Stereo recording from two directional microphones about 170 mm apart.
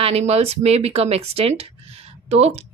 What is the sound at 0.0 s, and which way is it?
Speech, 40° right (ahead or behind).